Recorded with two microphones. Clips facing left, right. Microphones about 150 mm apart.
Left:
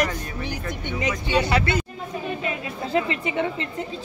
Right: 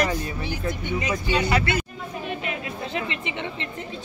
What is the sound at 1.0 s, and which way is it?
Speech, 20° left (ahead or behind).